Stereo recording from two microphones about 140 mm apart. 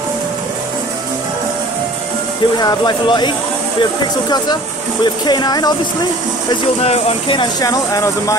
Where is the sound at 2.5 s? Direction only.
30° left (ahead or behind).